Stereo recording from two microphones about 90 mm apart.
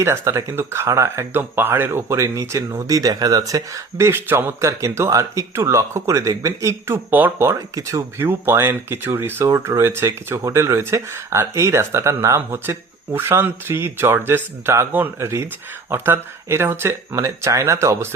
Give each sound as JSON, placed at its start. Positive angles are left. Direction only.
{"t": 0.0, "sound": "speech", "side_deg": -30}